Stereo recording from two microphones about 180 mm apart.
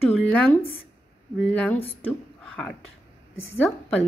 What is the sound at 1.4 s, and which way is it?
Speech, 5° left (ahead or behind).